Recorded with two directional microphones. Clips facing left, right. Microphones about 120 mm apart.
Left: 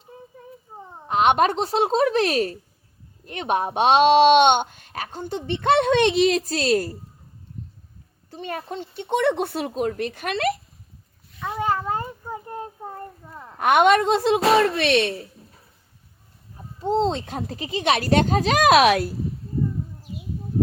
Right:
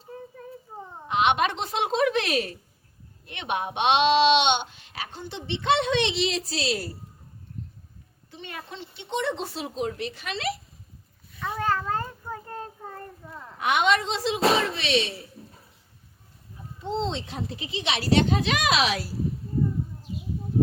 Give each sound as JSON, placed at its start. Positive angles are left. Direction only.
{"t": 0.7, "sound": "a sound", "side_deg": 0}
{"t": 1.0, "sound": "a woman's voice", "side_deg": 40}
{"t": 8.3, "sound": "speech", "side_deg": 45}
{"t": 11.3, "sound": "child singing", "side_deg": 15}
{"t": 13.2, "sound": "a sound", "side_deg": 15}
{"t": 13.6, "sound": "speech", "side_deg": 50}
{"t": 16.8, "sound": "speech", "side_deg": 45}